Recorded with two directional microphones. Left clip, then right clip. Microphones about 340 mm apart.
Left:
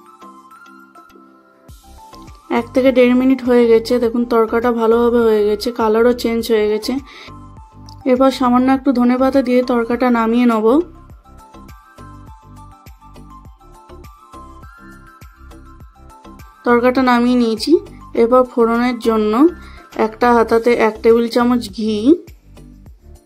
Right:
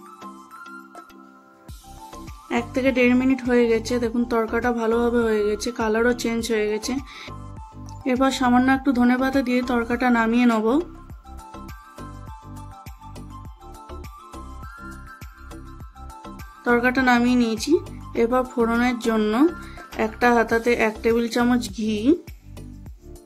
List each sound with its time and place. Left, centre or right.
2.0 s speech: centre
11.5 s music: centre
16.3 s speech: centre